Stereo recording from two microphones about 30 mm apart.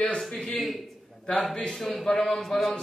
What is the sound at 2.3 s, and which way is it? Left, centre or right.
Speech, centre.